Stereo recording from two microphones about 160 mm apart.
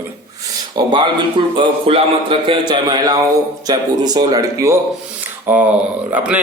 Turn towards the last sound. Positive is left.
turn(degrees=-10)  # may be behind; listen again after turning